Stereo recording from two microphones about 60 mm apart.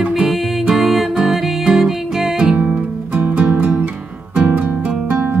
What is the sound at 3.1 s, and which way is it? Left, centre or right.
Music, right.